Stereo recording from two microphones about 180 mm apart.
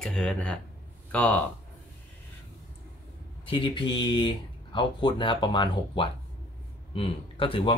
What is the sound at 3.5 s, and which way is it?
Speech, 25° left (ahead or behind).